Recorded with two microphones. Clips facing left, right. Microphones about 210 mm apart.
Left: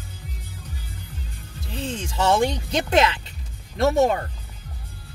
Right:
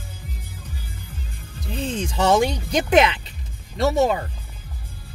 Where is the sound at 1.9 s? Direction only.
20° right (ahead or behind).